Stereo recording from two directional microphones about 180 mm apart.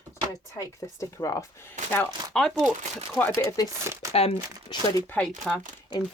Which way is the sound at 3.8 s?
15° right (ahead or behind).